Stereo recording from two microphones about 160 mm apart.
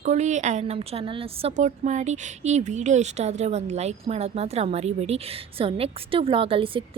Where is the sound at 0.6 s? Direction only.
40° right (ahead or behind).